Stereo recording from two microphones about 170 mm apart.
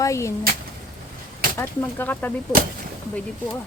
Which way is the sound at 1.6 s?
10° left (ahead or behind).